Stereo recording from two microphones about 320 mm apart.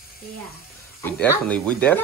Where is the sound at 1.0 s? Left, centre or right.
Centre.